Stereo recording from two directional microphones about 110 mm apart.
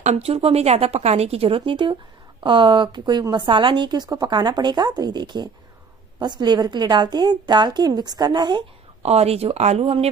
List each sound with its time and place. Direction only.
0.0 s a woman's voice: 75° right (ahead or behind); by 8.6 s 45° right (ahead or behind)
9.0 s speech: 70° right (ahead or behind)